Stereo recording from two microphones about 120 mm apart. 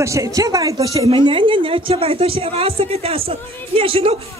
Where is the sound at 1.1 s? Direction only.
45° right (ahead or behind).